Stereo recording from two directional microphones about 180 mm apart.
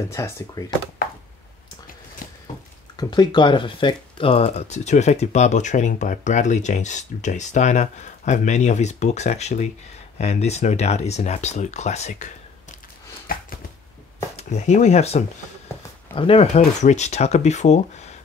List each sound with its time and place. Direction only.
0.1 s speech: 20° left (ahead or behind)
2.2 s a sound: 50° left (ahead or behind)
3.0 s speech: 25° left (ahead or behind); by 12.3 s 40° left (ahead or behind)
13.3 s chopping: 50° left (ahead or behind)
14.3 s speech: 40° left (ahead or behind)